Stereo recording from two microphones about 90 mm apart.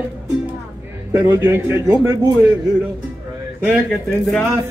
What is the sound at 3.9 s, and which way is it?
Speech, 5° left (ahead or behind).